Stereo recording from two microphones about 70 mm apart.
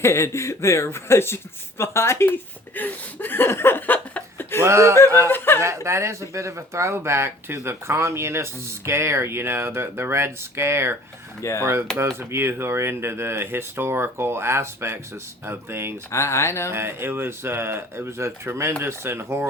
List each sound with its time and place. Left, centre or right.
0.0 s speech: left
4.6 s speech: right
16.1 s speech: left
16.7 s speech: right